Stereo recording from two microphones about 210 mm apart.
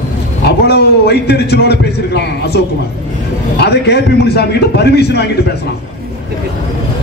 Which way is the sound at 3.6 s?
50° left (ahead or behind).